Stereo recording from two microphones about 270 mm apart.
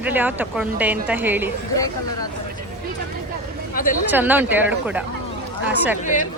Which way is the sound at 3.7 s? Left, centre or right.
Left.